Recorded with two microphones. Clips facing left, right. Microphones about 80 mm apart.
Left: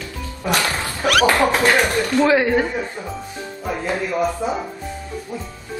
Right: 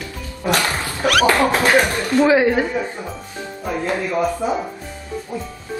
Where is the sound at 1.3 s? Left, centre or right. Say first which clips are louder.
Right 1 dB; right.